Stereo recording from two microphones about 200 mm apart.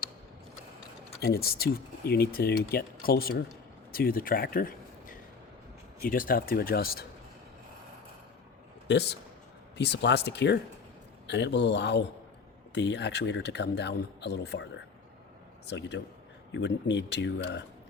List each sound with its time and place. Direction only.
1.2 s speech: 50° left (ahead or behind)
8.9 s speech: 55° left (ahead or behind)